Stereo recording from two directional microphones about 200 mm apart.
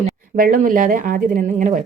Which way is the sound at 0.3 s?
45° right (ahead or behind).